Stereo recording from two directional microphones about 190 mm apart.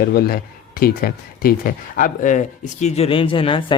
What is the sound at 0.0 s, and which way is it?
Speech, 50° left (ahead or behind).